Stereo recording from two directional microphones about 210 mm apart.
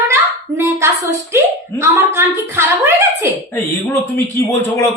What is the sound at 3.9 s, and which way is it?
Speech, 10° left (ahead or behind).